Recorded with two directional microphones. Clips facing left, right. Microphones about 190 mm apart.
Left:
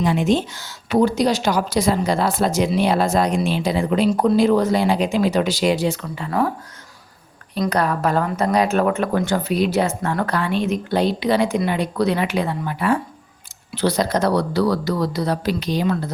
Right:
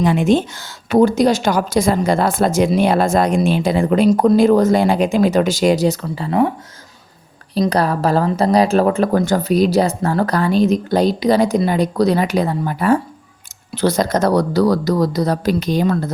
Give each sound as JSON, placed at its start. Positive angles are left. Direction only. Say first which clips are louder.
{"t": 0.0, "sound": "a woman's voice", "louder": "right 4 dB", "side_deg": -55}
{"t": 7.7, "sound": "a woman's voice", "louder": "right 2 dB", "side_deg": -35}